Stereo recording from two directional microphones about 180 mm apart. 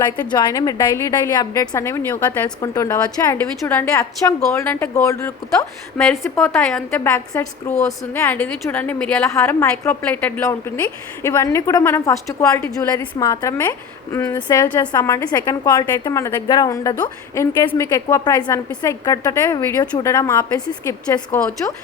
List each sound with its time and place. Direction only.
0.3 s a woman's voice: 25° left (ahead or behind)
3.3 s a woman's voice: 10° left (ahead or behind)
6.0 s a woman's voice: 5° left (ahead or behind)